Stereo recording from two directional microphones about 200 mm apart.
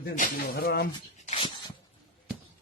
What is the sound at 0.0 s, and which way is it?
Speech, 50° left (ahead or behind).